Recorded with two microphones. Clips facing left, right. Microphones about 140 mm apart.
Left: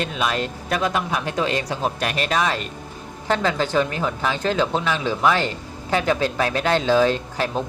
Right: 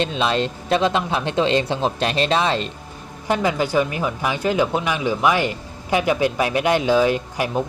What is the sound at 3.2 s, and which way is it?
Speech, 15° right (ahead or behind).